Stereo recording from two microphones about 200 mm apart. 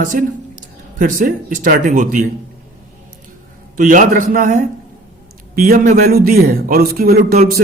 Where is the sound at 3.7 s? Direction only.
40° right (ahead or behind).